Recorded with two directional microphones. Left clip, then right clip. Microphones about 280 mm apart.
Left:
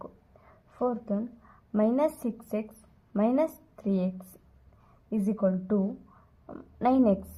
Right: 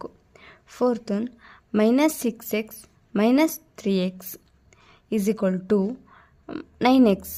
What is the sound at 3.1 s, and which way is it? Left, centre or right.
Speech, right.